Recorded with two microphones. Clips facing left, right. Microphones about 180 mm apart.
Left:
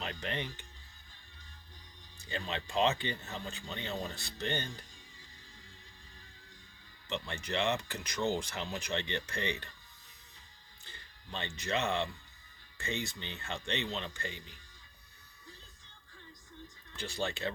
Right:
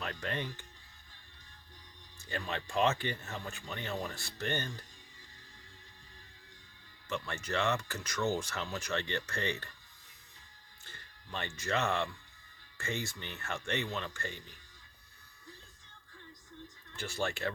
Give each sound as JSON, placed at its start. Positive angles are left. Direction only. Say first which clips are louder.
{"t": 0.0, "sound": "speech", "louder": "right 1 dB", "side_deg": 20}
{"t": 2.2, "sound": "speech", "louder": "even", "side_deg": 20}
{"t": 7.4, "sound": "speech", "louder": "even", "side_deg": 15}
{"t": 10.8, "sound": "speech", "louder": "left 1 dB", "side_deg": 20}
{"t": 16.9, "sound": "speech", "louder": "right 1 dB", "side_deg": 15}